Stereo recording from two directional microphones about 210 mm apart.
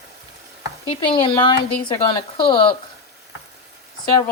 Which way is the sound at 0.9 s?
25° left (ahead or behind).